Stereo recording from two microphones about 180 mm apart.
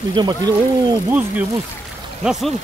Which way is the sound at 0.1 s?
25° right (ahead or behind).